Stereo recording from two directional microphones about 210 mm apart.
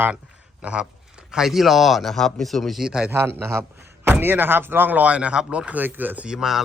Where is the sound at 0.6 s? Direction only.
5° right (ahead or behind).